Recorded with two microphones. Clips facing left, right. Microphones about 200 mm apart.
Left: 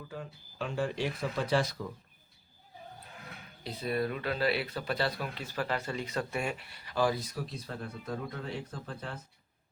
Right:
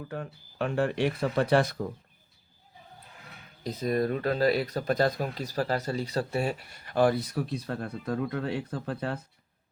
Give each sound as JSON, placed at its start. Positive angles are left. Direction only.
{"t": 0.1, "sound": "speech", "side_deg": -60}
{"t": 3.6, "sound": "speech", "side_deg": -40}